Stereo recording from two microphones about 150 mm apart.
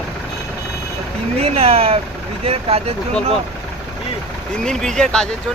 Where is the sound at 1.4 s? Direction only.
40° right (ahead or behind).